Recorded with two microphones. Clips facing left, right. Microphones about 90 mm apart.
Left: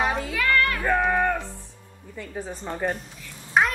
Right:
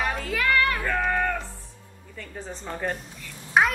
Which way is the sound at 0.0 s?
20° left (ahead or behind).